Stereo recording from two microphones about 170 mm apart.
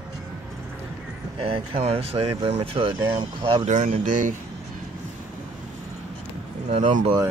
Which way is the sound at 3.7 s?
50° right (ahead or behind).